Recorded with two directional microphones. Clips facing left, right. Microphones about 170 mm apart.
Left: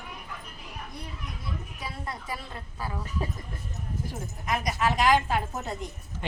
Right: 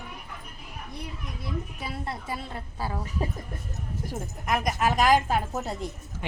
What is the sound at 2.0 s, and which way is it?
A woman's voice, 25° right (ahead or behind).